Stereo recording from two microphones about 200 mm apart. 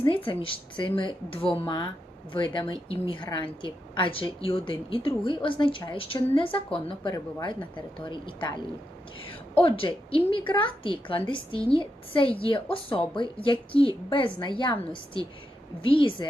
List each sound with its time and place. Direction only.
0.0 s a woman's voice: 25° left (ahead or behind)